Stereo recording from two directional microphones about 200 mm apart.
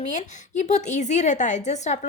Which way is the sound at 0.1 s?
35° left (ahead or behind).